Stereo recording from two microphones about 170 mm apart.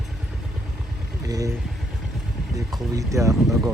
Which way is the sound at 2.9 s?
20° right (ahead or behind).